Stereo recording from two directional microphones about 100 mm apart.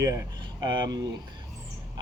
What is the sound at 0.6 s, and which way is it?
Speech, 45° right (ahead or behind).